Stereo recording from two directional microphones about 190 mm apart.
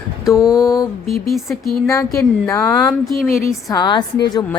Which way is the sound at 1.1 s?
Centre (ahead or behind).